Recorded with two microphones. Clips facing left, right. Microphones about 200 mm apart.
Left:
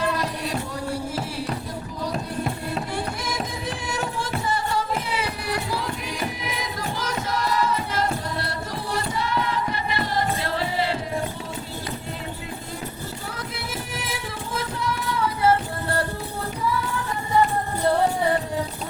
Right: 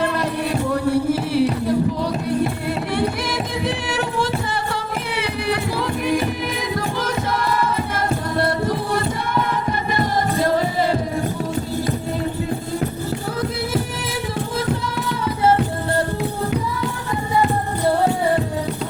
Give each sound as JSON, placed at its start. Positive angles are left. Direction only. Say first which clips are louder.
{"t": 0.7, "sound": "a sound", "louder": "right 10 dB", "side_deg": -65}
{"t": 2.9, "sound": "music", "louder": "right 7 dB", "side_deg": -65}
{"t": 6.6, "sound": "music", "louder": "right 6 dB", "side_deg": -55}